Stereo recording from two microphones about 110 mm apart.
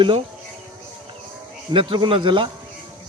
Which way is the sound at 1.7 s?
50° right (ahead or behind).